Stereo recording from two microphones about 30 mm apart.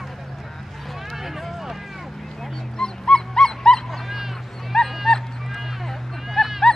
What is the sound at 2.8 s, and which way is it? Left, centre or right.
Dog, left.